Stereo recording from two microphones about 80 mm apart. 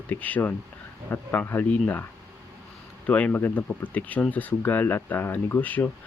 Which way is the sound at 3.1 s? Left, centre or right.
Left.